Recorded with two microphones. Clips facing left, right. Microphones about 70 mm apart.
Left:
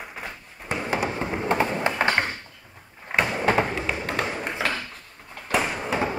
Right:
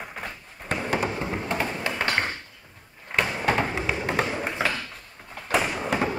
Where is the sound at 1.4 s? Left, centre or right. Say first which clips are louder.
Left 9 dB; left.